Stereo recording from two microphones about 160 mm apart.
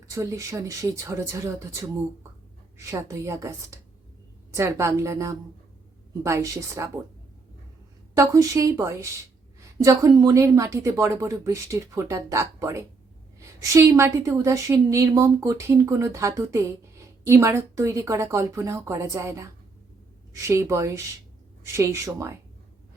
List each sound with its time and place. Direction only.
0.0 s a woman's voice: 20° right (ahead or behind)
8.1 s a woman's voice: 20° right (ahead or behind)